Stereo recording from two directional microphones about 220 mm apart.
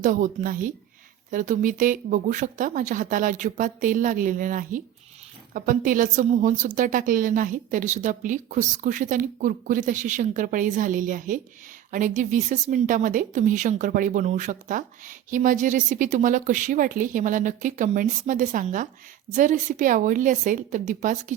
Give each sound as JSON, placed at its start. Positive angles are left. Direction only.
{"t": 0.0, "sound": "a woman's voice", "side_deg": -35}